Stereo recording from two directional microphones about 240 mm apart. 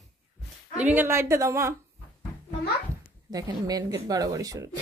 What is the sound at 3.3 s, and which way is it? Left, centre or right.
A woman's voice, centre.